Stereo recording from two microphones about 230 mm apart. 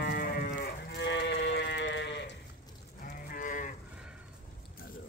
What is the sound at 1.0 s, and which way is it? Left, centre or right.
Sheep, left.